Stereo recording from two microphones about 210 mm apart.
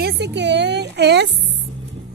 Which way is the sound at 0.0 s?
55° right (ahead or behind).